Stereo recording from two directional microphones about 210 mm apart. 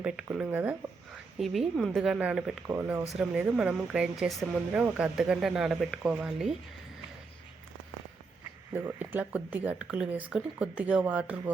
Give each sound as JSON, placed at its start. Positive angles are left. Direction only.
{"t": 0.0, "sound": "speech", "side_deg": -5}
{"t": 8.8, "sound": "speech", "side_deg": -10}